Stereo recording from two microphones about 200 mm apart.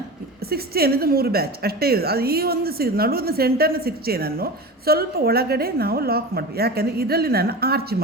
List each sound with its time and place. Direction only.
0.5 s a woman's voice: 50° right (ahead or behind)